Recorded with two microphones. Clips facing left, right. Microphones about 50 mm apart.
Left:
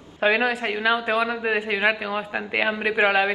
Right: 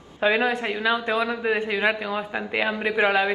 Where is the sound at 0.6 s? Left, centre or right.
Left.